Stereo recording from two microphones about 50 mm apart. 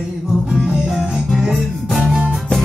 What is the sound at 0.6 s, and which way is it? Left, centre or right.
Music, centre.